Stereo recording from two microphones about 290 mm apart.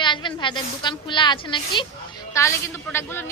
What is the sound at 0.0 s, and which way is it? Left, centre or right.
A woman's voice, centre.